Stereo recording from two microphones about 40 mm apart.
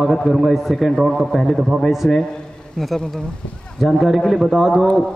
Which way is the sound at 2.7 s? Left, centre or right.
Centre.